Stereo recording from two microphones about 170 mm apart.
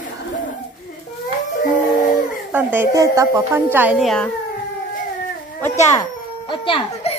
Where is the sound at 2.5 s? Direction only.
10° right (ahead or behind).